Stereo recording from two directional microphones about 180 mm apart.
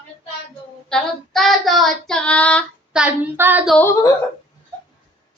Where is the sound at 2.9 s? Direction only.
5° right (ahead or behind).